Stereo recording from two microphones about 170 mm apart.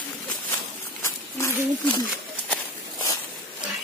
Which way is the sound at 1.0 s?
15° left (ahead or behind).